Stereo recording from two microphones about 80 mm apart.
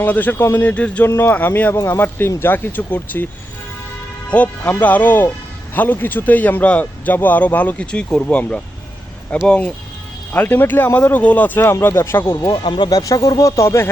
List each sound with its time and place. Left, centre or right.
0.0 s speech: left
1.0 s speech: left
1.7 s a man's voice: left
4.3 s speech: centre
12.6 s speech: left
12.9 s speech: left